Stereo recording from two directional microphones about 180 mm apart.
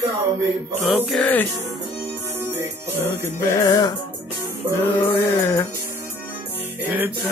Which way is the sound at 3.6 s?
20° left (ahead or behind).